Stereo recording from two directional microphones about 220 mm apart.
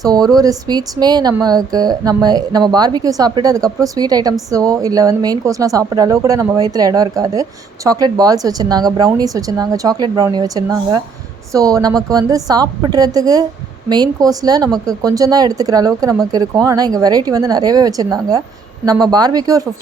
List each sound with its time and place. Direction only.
0.0 s a woman's voice: 15° right (ahead or behind)